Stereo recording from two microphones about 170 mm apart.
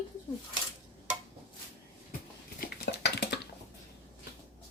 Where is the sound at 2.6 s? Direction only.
85° left.